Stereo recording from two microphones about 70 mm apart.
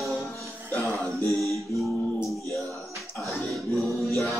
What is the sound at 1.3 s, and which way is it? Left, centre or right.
Music, centre.